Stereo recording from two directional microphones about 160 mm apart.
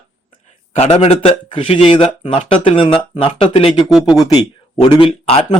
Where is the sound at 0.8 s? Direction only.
40° left (ahead or behind).